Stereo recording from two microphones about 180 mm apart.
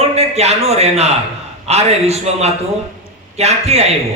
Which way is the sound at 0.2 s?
35° right (ahead or behind).